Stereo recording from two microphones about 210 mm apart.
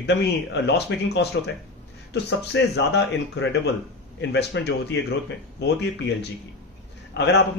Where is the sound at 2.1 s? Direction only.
55° left (ahead or behind).